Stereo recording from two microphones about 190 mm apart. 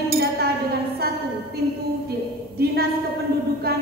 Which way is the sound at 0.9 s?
55° right (ahead or behind).